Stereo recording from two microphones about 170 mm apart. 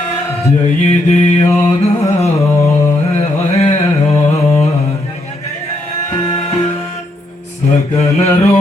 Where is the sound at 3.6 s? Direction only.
40° left (ahead or behind).